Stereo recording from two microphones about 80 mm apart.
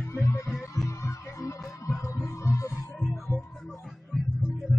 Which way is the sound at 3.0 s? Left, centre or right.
Centre.